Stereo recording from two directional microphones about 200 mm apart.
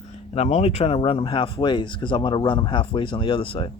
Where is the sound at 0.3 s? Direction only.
30° left (ahead or behind).